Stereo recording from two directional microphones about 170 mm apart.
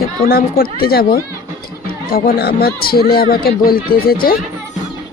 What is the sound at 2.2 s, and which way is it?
Speech, 65° left (ahead or behind).